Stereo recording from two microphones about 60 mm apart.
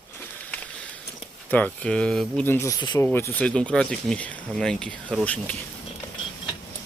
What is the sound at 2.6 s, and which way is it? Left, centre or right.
Speech, left.